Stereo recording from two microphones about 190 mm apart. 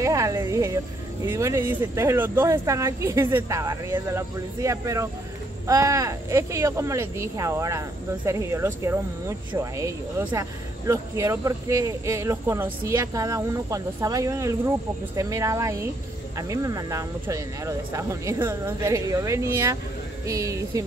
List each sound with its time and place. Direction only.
0.0 s music: 15° right (ahead or behind)
1.2 s speech: 15° right (ahead or behind)